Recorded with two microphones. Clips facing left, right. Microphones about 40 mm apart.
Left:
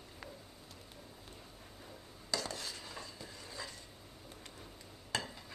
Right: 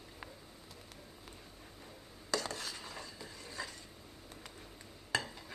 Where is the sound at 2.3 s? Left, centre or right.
Right.